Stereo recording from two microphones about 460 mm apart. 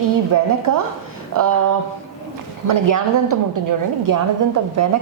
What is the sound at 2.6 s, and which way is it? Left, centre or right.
A woman's voice, right.